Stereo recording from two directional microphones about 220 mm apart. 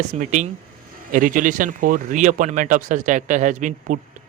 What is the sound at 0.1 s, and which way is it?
Speech, 35° right (ahead or behind).